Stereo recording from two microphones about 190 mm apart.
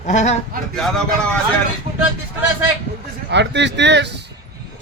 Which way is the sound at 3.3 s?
65° right (ahead or behind).